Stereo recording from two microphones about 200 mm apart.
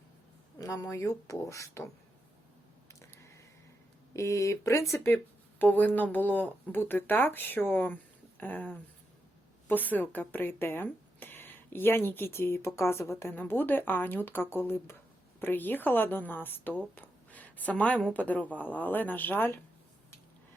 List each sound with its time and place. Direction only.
0.6 s speech: 15° left (ahead or behind)
3.0 s a sound: 15° left (ahead or behind)
4.1 s speech: 15° left (ahead or behind)